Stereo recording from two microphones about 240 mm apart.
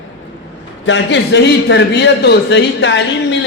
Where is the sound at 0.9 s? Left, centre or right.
Left.